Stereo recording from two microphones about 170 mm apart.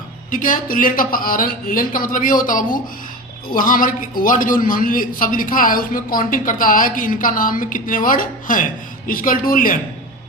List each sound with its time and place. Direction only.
0.3 s a man's voice: 50° left (ahead or behind)